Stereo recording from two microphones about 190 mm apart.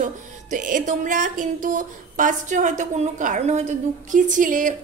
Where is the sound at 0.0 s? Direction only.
40° right (ahead or behind).